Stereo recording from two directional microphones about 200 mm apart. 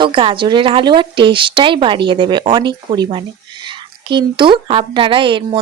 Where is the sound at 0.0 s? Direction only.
25° right (ahead or behind).